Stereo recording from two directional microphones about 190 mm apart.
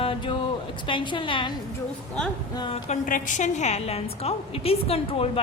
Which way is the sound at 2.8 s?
45° left (ahead or behind).